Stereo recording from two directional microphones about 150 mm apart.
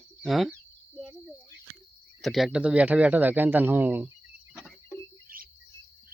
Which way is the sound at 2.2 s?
Centre (ahead or behind).